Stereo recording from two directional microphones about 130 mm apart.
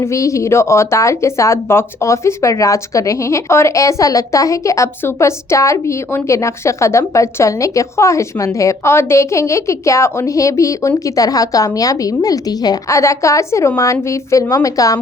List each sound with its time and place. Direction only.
0.0 s speech: 25° left (ahead or behind)